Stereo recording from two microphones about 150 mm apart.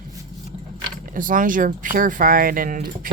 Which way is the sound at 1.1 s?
65° right (ahead or behind).